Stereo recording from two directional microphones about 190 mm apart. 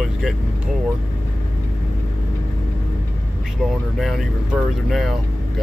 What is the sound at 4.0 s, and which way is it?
Speech, centre (ahead or behind).